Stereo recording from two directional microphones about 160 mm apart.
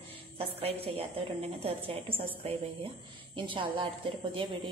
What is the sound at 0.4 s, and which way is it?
A woman's voice, 40° right (ahead or behind).